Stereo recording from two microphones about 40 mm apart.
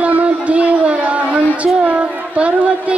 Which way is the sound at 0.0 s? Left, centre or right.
Right.